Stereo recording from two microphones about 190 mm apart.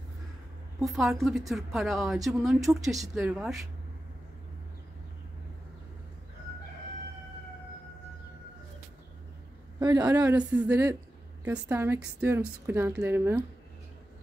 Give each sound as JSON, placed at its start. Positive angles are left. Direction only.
{"t": 0.8, "sound": "speech", "side_deg": 0}
{"t": 9.8, "sound": "a woman's voice", "side_deg": -20}
{"t": 10.1, "sound": "a woman's voice", "side_deg": -10}